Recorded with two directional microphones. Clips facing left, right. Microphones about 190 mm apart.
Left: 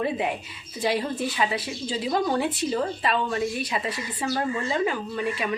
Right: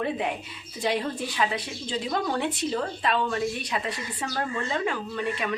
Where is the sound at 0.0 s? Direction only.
5° left (ahead or behind).